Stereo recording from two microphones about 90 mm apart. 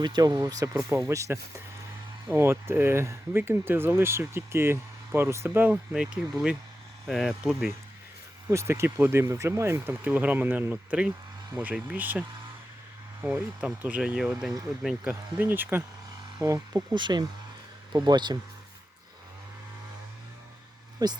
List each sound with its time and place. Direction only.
0.0 s speech: 50° right (ahead or behind); by 5.6 s 30° right (ahead or behind)
5.9 s speech: 5° right (ahead or behind)
8.4 s speech: 30° right (ahead or behind)
9.8 s speech: 20° right (ahead or behind)
13.2 s speech: 20° right (ahead or behind)
15.4 s speech: 20° right (ahead or behind)
16.4 s speech: 35° right (ahead or behind)
16.9 s speech: 55° right (ahead or behind)
21.0 s speech: 50° right (ahead or behind)